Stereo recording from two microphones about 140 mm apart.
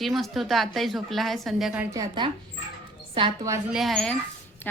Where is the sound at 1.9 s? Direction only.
30° right (ahead or behind).